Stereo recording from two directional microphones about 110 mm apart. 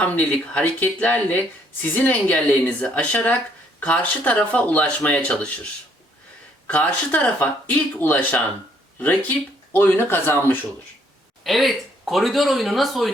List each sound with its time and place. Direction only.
0.0 s speech: 10° left (ahead or behind)
6.7 s speech: 10° left (ahead or behind)
9.7 s speech: 20° left (ahead or behind)
11.4 s speech: centre (ahead or behind)